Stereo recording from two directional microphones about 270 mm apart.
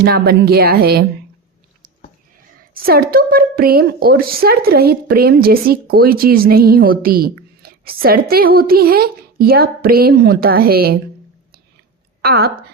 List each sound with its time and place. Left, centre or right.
0.0 s a woman's voice: right
2.7 s a woman's voice: right
12.2 s a woman's voice: right